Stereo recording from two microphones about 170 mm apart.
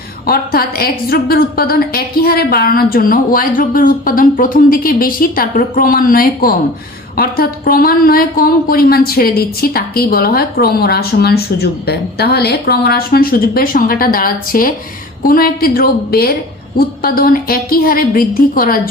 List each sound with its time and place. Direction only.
0.3 s a woman's voice: 65° left (ahead or behind)